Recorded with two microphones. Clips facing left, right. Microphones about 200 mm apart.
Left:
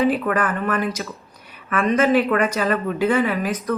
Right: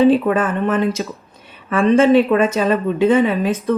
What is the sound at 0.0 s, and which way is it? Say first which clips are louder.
Speech: right 6 dB; 25° right (ahead or behind).